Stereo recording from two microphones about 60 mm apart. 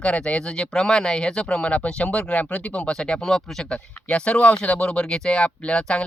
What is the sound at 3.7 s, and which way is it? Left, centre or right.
Speech, centre.